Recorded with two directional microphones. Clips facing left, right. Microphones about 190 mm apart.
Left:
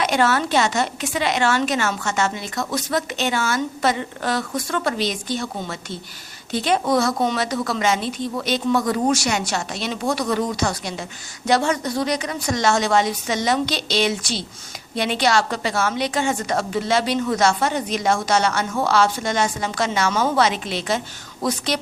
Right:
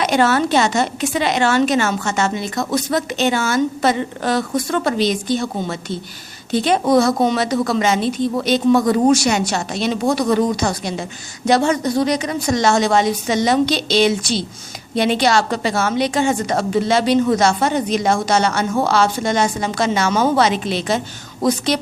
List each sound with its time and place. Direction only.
0.0 s a woman's voice: 25° right (ahead or behind)